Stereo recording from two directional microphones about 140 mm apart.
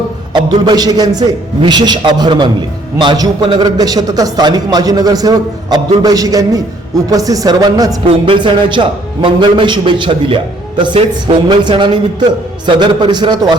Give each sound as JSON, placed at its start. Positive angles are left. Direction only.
{"t": 0.6, "sound": "a man's voice", "side_deg": -30}